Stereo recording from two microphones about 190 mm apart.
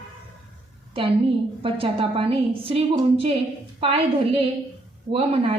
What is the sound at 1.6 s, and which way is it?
A woman's voice, 30° right (ahead or behind).